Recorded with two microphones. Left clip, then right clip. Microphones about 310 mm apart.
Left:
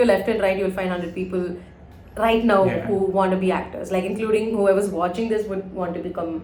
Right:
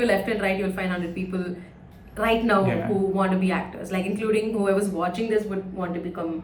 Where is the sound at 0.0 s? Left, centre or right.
Centre.